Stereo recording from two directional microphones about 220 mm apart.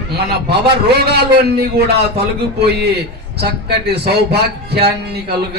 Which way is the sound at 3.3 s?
50° right (ahead or behind).